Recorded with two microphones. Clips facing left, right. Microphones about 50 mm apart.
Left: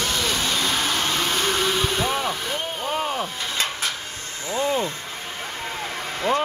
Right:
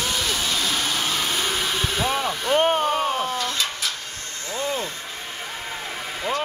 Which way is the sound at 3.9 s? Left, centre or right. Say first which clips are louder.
Left 1 dB; centre.